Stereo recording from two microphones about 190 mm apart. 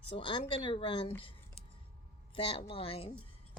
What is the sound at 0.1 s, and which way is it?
Speech, 25° left (ahead or behind).